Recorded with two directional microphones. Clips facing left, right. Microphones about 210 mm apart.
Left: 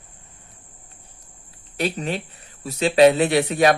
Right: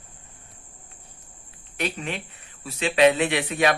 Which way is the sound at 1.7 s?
35° left (ahead or behind).